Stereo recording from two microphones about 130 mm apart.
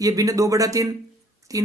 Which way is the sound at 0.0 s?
25° right (ahead or behind).